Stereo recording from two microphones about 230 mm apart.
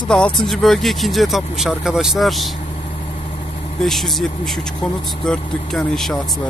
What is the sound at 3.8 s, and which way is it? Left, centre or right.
Speech, centre.